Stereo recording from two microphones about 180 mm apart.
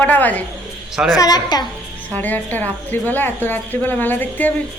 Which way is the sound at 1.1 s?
20° left (ahead or behind).